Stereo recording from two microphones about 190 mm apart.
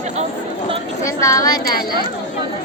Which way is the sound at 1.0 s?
15° left (ahead or behind).